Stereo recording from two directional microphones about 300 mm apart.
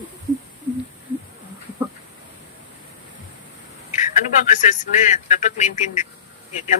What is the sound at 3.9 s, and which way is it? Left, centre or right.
A man's voice, left.